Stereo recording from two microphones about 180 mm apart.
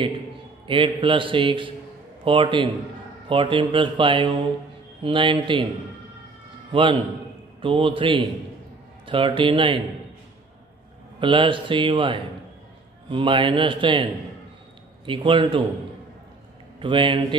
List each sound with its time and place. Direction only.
0.7 s speech: 30° right (ahead or behind)
6.7 s a man's voice: 30° right (ahead or behind)
11.1 s speech: 30° right (ahead or behind)
15.0 s speech: 30° right (ahead or behind)
16.8 s speech: 25° right (ahead or behind)